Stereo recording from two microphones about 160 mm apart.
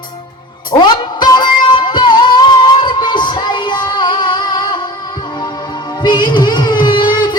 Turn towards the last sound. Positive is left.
turn(degrees=30)  # may be behind; listen again after turning